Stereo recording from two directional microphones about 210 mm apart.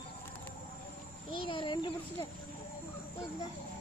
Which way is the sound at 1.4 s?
25° left (ahead or behind).